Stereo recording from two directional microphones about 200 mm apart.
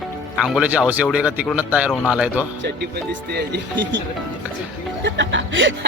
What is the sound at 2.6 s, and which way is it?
Speech, 55° right (ahead or behind).